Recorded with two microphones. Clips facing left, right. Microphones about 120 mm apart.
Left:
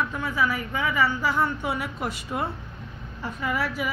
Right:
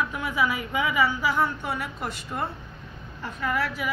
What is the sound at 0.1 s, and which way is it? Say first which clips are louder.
A woman's voice: even; 15° right (ahead or behind).